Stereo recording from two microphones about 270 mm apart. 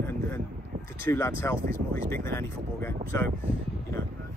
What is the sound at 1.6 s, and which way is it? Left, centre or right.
Speech, right.